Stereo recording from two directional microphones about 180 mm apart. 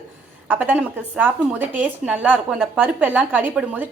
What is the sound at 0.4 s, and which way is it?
A woman's voice, 10° right (ahead or behind).